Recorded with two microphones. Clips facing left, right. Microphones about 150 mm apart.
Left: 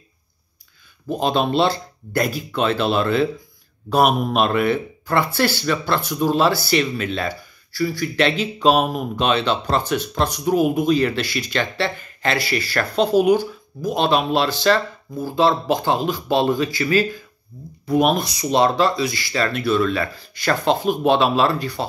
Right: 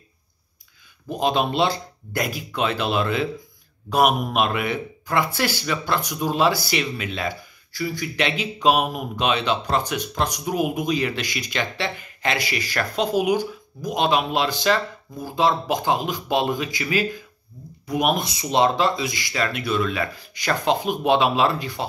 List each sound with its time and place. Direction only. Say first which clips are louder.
1.2 s speech: left 2 dB; 15° right (ahead or behind)
4.5 s speech: left 6 dB; 15° right (ahead or behind)